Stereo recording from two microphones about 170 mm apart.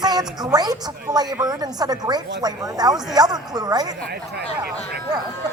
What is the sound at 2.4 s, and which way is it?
Speech, 20° right (ahead or behind).